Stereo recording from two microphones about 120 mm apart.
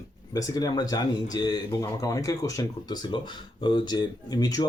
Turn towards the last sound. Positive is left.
turn(degrees=30)  # may be behind; listen again after turning